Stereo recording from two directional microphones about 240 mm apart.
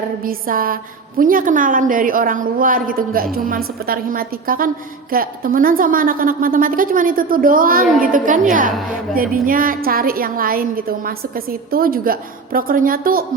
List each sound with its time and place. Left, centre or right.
0.3 s a woman's voice: right